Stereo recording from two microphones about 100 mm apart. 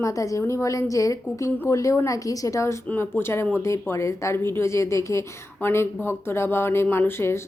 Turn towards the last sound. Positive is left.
turn(degrees=25)  # may be behind; listen again after turning